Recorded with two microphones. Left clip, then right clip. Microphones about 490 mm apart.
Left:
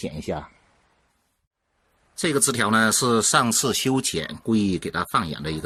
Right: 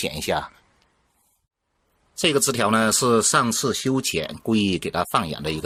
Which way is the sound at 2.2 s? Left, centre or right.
Centre.